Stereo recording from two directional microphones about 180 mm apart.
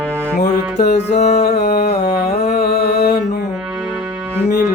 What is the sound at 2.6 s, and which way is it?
Music, 65° left (ahead or behind).